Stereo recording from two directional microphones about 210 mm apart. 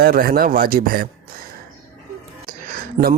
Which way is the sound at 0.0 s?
45° right (ahead or behind).